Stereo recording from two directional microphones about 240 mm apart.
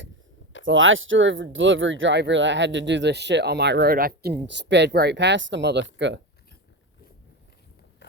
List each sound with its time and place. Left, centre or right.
0.6 s speech: right